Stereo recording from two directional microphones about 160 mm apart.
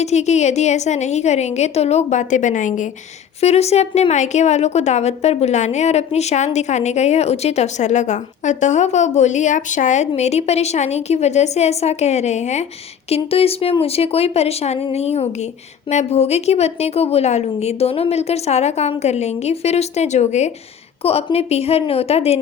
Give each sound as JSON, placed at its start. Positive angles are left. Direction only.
{"t": 0.0, "sound": "a woman's voice", "side_deg": 45}
{"t": 3.4, "sound": "a woman's voice", "side_deg": 40}